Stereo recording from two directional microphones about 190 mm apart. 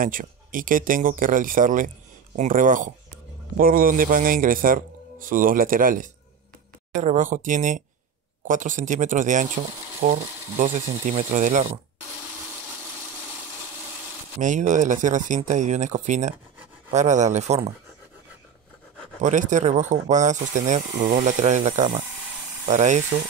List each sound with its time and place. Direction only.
0.0 s a man's voice: 45° right (ahead or behind)
14.4 s speech: 40° right (ahead or behind)
19.2 s speech: 40° right (ahead or behind)
20.9 s speech: 55° right (ahead or behind)
21.2 s speech: 40° right (ahead or behind)